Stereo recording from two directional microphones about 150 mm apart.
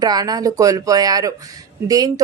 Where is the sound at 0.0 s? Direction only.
25° right (ahead or behind).